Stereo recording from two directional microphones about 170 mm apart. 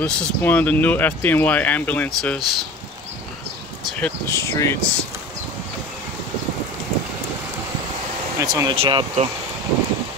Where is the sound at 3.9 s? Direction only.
10° left (ahead or behind).